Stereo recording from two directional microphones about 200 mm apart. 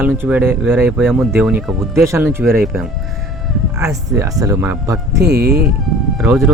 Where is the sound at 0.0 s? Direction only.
10° right (ahead or behind).